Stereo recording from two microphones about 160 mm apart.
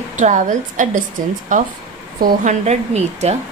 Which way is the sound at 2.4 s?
45° right (ahead or behind).